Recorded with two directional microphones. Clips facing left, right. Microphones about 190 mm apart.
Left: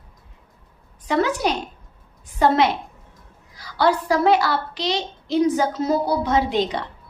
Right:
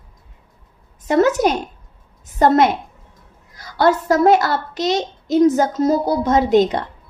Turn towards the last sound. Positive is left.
turn(degrees=-45)  # may be behind; listen again after turning